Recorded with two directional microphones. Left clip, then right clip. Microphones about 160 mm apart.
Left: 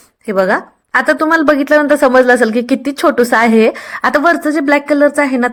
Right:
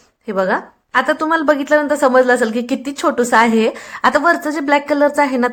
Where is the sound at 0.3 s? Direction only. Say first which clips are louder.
Left 4 dB; 30° left (ahead or behind).